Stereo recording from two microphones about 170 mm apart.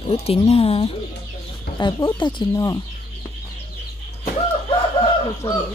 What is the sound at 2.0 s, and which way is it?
Speech, 30° left (ahead or behind).